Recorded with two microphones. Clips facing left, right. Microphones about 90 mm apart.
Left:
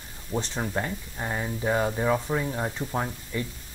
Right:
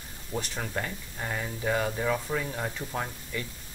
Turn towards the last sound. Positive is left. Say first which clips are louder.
# left 4 dB
turn(degrees=20)  # may be behind; listen again after turning